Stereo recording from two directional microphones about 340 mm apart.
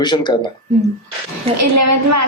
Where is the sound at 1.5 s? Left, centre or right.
Right.